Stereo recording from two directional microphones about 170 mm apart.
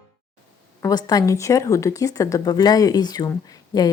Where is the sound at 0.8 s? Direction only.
20° left (ahead or behind).